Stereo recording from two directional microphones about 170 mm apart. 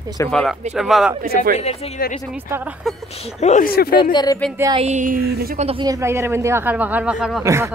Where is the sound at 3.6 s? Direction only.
60° left (ahead or behind).